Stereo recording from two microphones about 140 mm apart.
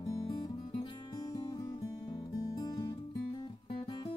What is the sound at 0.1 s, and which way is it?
Music, 25° left (ahead or behind).